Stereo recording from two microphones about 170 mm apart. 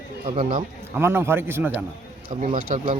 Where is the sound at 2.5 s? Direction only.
55° right (ahead or behind).